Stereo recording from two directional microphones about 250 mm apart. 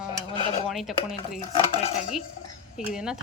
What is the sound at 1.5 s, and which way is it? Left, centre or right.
Dishes, left.